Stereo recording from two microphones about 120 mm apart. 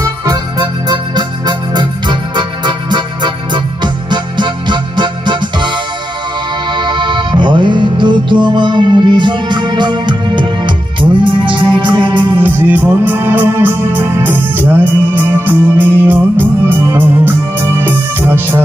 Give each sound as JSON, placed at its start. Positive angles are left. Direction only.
{"t": 0.0, "sound": "music", "side_deg": -30}
{"t": 6.7, "sound": "music", "side_deg": -40}
{"t": 12.4, "sound": "music", "side_deg": -15}